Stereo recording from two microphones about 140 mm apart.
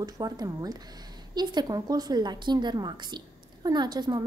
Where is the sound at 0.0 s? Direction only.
30° right (ahead or behind).